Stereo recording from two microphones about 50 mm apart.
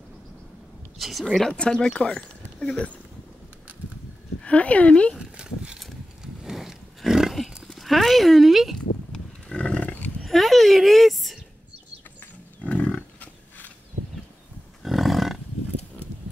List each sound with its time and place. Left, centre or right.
0.9 s a woman's voice: centre
4.4 s speech: left
5.4 s a sound: centre
6.2 s horse: centre
9.1 s roaring cats: centre
10.2 s a sound: centre
12.6 s livestock: left
14.8 s roaring cats: centre